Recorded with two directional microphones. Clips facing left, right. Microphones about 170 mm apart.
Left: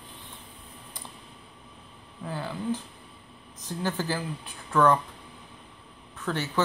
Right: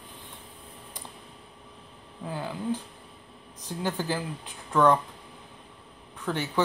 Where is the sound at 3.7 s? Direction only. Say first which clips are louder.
Even; 15° right (ahead or behind).